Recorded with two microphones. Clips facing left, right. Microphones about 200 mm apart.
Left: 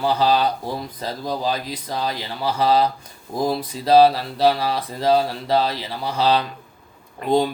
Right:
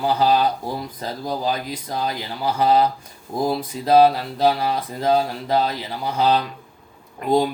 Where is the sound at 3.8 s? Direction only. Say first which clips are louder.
Left 1 dB; 35° left (ahead or behind).